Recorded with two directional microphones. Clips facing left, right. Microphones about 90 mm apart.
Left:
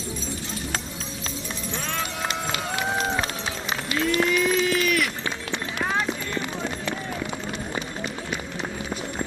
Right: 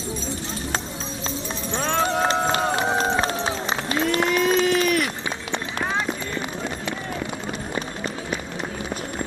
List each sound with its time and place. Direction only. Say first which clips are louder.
1.7 s run: right 10 dB; 30° right (ahead or behind)
7.8 s run: right 2 dB; 40° right (ahead or behind)